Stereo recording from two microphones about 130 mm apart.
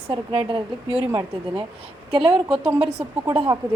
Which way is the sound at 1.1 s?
30° right (ahead or behind).